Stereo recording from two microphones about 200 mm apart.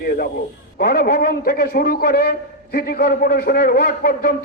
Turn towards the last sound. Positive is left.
turn(degrees=50)  # may be behind; listen again after turning